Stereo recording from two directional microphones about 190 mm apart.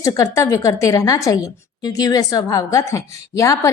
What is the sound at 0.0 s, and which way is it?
A woman's voice, 15° left (ahead or behind).